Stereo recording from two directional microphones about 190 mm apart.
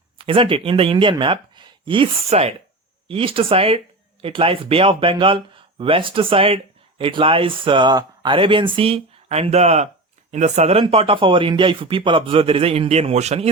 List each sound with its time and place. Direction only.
0.2 s speech: 30° right (ahead or behind)